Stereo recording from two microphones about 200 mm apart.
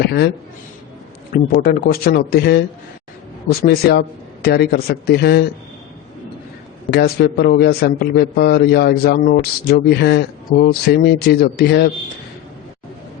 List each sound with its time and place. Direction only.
0.0 s a man's voice: 55° left (ahead or behind)
1.3 s a man's voice: 45° left (ahead or behind)
6.9 s a man's voice: 50° left (ahead or behind)